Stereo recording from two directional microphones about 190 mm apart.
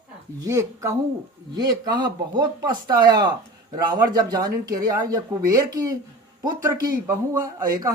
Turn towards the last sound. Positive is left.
turn(degrees=-20)  # may be behind; listen again after turning